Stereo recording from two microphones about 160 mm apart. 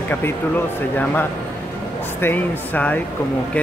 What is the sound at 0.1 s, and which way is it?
Speech, 10° left (ahead or behind).